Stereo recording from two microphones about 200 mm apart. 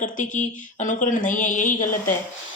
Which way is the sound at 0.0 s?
40° left (ahead or behind).